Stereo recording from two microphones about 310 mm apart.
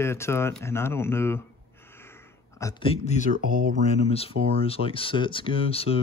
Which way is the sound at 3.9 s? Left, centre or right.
Centre.